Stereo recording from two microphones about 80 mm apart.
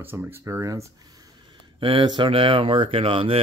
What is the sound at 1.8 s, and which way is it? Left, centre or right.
Speech, right.